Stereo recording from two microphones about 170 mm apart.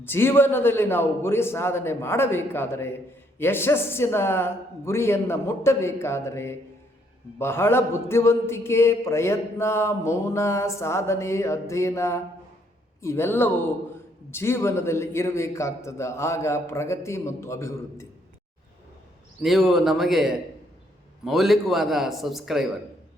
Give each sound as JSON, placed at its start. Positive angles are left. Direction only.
{"t": 0.0, "sound": "speech", "side_deg": 15}
{"t": 19.4, "sound": "a man's voice", "side_deg": 0}